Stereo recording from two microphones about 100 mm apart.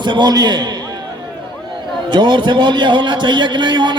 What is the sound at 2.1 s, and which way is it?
A man's voice, 50° right (ahead or behind).